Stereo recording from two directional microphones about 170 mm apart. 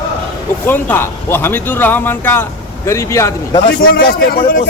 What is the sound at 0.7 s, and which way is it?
Speech, 10° left (ahead or behind).